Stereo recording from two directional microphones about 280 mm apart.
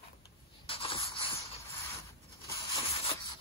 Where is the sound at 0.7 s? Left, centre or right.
Centre.